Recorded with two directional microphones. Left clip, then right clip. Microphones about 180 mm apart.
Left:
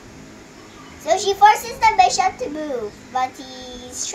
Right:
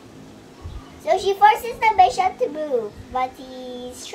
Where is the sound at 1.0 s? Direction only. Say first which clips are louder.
Left 2 dB; 15° right (ahead or behind).